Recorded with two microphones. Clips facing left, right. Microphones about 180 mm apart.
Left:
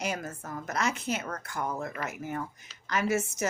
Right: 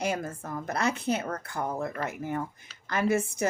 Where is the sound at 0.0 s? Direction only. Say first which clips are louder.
Right 3 dB; 30° right (ahead or behind).